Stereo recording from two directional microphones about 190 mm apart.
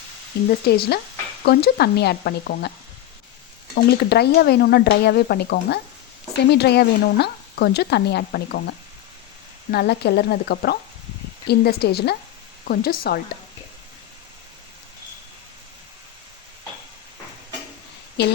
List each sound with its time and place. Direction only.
0.6 s speech: 55° left (ahead or behind)
3.8 s speech: 55° left (ahead or behind)
9.7 s speech: 60° left (ahead or behind)
18.2 s speech: 60° left (ahead or behind)